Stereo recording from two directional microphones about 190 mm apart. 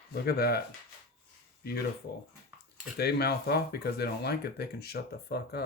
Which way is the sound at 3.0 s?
55° left (ahead or behind).